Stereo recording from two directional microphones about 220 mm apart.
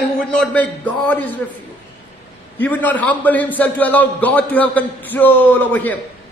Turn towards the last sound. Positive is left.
turn(degrees=10)  # may be behind; listen again after turning